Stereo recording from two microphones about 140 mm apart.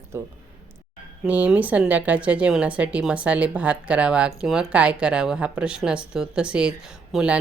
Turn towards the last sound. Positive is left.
turn(degrees=-10)  # may be behind; listen again after turning